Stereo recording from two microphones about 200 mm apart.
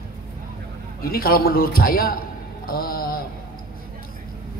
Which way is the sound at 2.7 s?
50° left (ahead or behind).